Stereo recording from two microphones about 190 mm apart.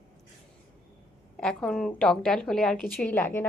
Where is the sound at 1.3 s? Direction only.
5° left (ahead or behind).